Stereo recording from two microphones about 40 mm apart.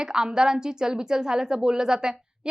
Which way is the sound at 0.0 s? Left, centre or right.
Centre.